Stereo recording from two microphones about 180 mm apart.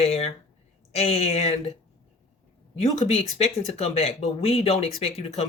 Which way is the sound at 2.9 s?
35° left (ahead or behind).